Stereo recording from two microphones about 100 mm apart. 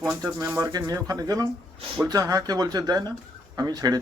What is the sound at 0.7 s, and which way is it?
Speech, 40° right (ahead or behind).